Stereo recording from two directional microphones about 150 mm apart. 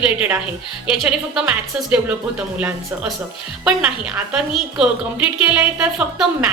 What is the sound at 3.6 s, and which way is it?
A woman's voice, 5° right (ahead or behind).